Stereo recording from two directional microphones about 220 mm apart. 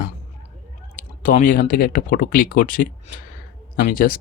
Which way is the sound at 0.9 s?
35° left (ahead or behind).